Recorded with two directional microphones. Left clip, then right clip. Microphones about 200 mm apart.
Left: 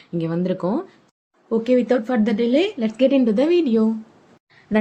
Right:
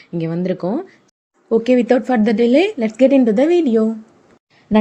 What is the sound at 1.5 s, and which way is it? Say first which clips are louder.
A woman's voice: right 4 dB; 20° right (ahead or behind).